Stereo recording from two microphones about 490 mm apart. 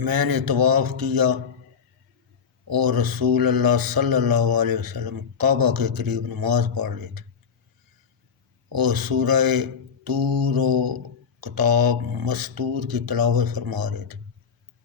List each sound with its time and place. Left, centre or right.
0.0 s speech: right
2.6 s speech: right
8.7 s speech: right